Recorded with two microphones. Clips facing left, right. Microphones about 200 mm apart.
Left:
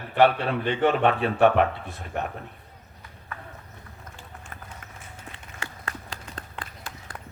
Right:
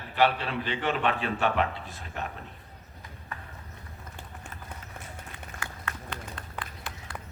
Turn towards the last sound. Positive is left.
turn(degrees=25)  # may be behind; listen again after turning